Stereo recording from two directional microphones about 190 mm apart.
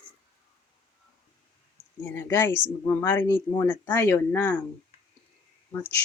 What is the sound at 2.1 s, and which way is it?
Speech, 15° left (ahead or behind).